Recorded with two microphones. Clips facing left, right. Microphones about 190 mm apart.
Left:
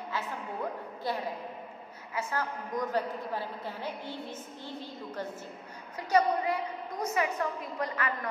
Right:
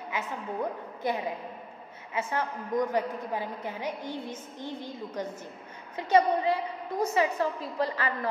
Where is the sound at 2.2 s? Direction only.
25° right (ahead or behind).